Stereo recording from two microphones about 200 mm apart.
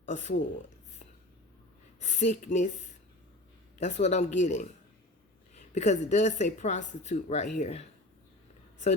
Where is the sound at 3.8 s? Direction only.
35° left (ahead or behind).